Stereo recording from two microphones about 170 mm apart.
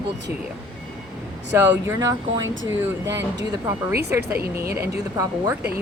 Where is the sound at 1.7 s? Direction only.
20° right (ahead or behind).